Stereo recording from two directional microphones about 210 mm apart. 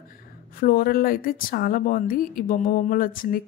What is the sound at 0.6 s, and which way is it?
A woman's voice, 45° left (ahead or behind).